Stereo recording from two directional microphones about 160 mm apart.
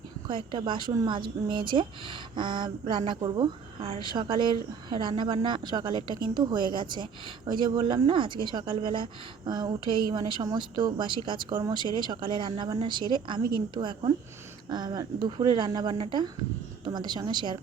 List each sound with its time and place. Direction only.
0.3 s speech: 30° right (ahead or behind)